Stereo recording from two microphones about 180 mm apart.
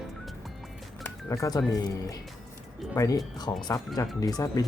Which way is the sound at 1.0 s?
20° left (ahead or behind).